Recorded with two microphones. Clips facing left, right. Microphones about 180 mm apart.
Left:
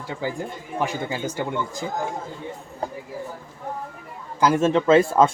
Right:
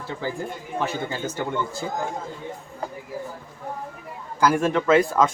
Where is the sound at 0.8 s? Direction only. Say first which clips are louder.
Left 1 dB; 15° left (ahead or behind).